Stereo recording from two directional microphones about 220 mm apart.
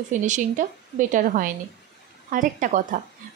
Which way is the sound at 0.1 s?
35° right (ahead or behind).